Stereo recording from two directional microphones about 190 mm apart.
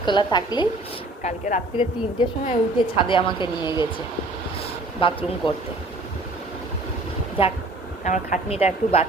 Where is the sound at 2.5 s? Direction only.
25° left (ahead or behind).